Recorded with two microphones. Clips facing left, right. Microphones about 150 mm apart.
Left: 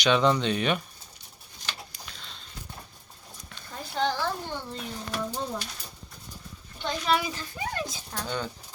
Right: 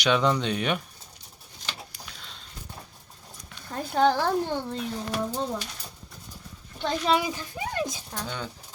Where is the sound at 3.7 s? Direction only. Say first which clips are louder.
Right 6 dB; 55° right (ahead or behind).